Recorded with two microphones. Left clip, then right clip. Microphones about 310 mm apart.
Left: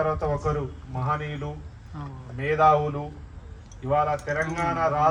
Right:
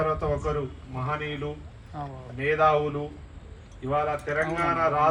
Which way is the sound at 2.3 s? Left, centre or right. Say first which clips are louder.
Left 2 dB; left.